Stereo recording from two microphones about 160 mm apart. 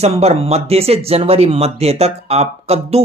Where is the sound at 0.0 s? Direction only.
40° right (ahead or behind).